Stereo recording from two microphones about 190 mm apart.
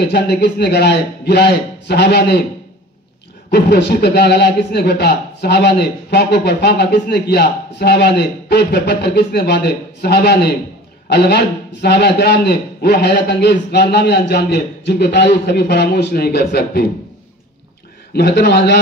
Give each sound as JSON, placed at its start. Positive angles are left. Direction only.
{"t": 0.0, "sound": "a man's voice", "side_deg": 60}
{"t": 3.4, "sound": "a man's voice", "side_deg": 60}
{"t": 18.1, "sound": "a man's voice", "side_deg": 55}